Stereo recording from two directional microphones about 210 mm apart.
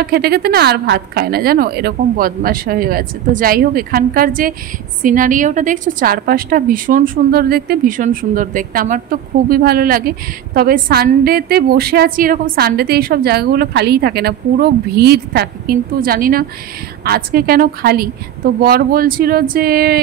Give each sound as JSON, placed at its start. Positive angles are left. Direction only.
{"t": 0.0, "sound": "a woman's voice", "side_deg": -45}